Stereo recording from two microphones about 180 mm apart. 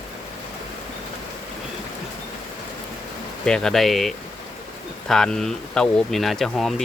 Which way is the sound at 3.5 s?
5° left (ahead or behind).